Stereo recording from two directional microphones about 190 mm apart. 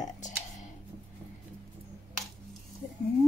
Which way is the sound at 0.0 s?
40° left (ahead or behind).